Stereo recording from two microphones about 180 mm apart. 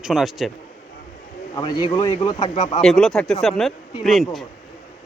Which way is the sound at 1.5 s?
25° left (ahead or behind).